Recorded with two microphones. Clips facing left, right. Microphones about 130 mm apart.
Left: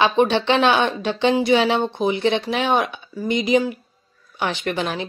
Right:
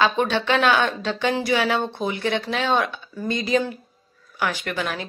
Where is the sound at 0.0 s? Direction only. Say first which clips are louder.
Left 4 dB; 20° left (ahead or behind).